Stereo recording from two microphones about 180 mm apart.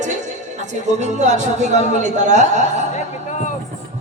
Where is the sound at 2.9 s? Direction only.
40° left (ahead or behind).